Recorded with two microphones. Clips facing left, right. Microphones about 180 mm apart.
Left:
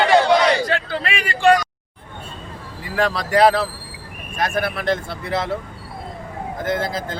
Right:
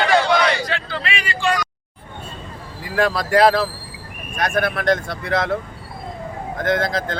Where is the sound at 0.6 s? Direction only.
45° left (ahead or behind).